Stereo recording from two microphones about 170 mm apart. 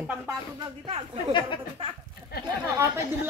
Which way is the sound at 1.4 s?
25° left (ahead or behind).